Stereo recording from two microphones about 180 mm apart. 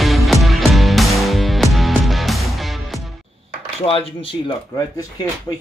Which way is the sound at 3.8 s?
30° left (ahead or behind).